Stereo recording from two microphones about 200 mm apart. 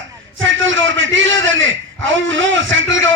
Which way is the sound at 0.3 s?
70° right (ahead or behind).